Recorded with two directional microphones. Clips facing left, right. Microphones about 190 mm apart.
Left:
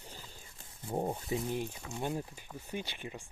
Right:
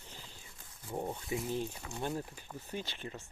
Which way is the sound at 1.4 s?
15° left (ahead or behind).